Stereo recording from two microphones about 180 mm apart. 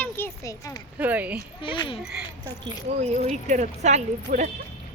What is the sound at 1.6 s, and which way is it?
Speech, 30° left (ahead or behind).